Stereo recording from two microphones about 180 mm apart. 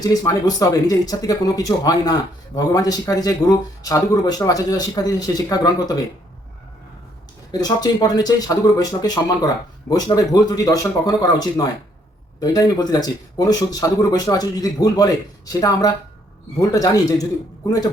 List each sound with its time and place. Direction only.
0.0 s speech: 20° left (ahead or behind)
7.5 s speech: 20° left (ahead or behind)
16.6 s speech: 20° left (ahead or behind)